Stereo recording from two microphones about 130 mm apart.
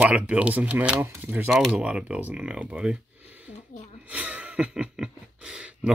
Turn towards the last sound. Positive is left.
turn(degrees=-10)  # may be behind; listen again after turning